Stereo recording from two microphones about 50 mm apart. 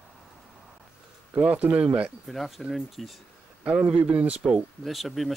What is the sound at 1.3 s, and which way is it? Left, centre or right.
Speech, right.